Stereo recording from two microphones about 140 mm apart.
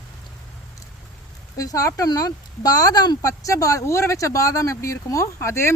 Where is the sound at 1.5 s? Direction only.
25° left (ahead or behind).